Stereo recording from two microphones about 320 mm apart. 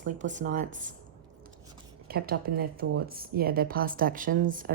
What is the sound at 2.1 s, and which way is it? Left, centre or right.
Speech, right.